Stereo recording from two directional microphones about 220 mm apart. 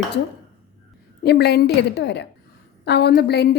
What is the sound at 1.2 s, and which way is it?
A woman's voice, 45° left (ahead or behind).